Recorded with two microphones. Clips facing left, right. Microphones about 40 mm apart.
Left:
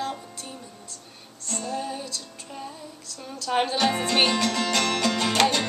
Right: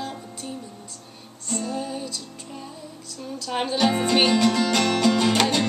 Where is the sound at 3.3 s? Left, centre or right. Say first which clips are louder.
Left 2 dB; centre.